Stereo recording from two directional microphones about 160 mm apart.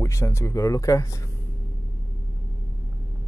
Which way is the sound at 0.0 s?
20° left (ahead or behind).